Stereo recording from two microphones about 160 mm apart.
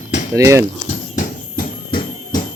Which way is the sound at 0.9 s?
55° left (ahead or behind).